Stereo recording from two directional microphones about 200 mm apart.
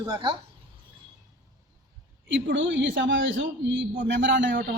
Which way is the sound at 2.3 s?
65° right (ahead or behind).